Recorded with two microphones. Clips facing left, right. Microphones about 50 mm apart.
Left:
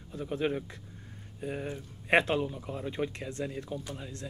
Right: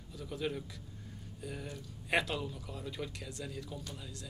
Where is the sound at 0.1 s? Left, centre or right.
Left.